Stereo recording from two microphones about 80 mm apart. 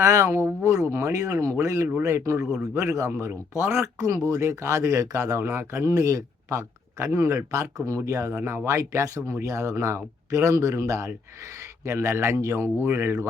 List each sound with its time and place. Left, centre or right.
0.0 s speech: right
3.9 s speech: right
5.9 s speech: right
8.3 s speech: right